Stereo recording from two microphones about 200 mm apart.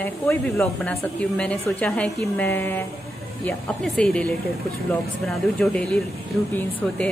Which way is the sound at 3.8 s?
5° left (ahead or behind).